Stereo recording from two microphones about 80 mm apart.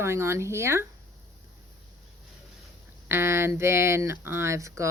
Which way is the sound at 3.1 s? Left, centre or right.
Right.